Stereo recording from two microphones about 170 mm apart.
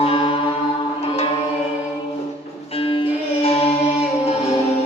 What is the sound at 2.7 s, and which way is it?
Music, 35° left (ahead or behind).